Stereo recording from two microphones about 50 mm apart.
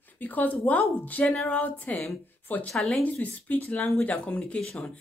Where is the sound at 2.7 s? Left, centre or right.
Centre.